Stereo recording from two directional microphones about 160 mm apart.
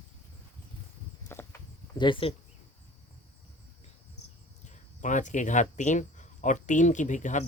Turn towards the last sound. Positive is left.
turn(degrees=50)  # may be behind; listen again after turning